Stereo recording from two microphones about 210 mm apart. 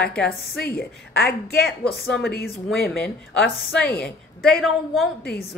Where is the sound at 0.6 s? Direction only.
50° left (ahead or behind).